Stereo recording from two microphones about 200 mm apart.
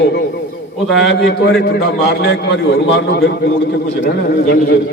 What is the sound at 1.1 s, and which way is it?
A man's voice, 55° left (ahead or behind).